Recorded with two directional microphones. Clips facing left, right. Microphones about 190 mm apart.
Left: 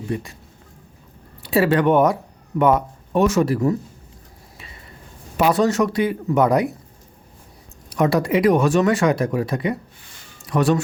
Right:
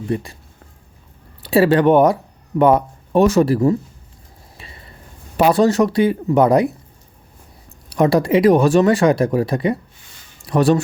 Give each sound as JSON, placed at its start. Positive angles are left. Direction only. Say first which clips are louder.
{"t": 0.1, "sound": "speech", "louder": "right 4 dB", "side_deg": -35}
{"t": 1.4, "sound": "speech", "louder": "right 4 dB", "side_deg": -30}
{"t": 5.4, "sound": "speech", "louder": "right 4 dB", "side_deg": -30}
{"t": 7.9, "sound": "speech", "louder": "right 4 dB", "side_deg": -30}